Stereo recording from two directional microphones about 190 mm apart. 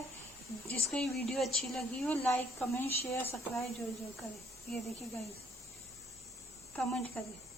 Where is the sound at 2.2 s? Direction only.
15° left (ahead or behind).